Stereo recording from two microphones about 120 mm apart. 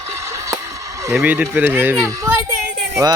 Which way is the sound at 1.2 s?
15° right (ahead or behind).